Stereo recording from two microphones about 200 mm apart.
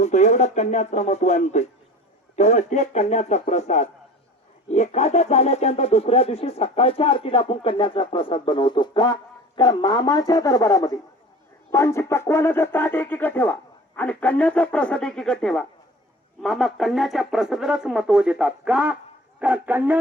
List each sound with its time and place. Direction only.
0.0 s speech: 35° left (ahead or behind); by 20.0 s 10° right (ahead or behind)